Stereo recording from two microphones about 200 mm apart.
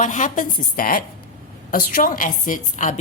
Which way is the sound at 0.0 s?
40° left (ahead or behind).